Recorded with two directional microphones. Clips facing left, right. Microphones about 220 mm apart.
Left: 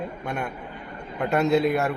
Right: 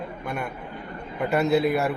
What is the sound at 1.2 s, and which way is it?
Speech, centre (ahead or behind).